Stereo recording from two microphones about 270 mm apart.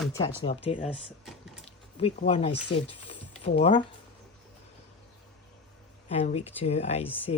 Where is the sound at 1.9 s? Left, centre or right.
Left.